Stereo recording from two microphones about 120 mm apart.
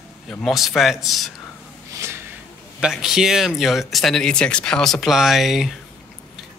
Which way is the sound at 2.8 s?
5° right (ahead or behind).